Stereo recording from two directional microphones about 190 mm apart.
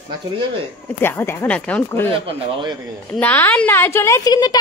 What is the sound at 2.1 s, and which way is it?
Speech, 25° right (ahead or behind).